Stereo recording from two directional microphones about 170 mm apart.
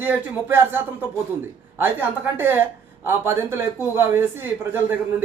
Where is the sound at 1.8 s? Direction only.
10° right (ahead or behind).